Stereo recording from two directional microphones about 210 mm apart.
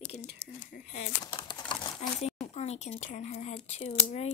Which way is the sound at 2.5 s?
30° left (ahead or behind).